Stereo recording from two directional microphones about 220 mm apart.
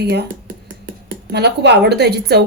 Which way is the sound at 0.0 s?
50° right (ahead or behind).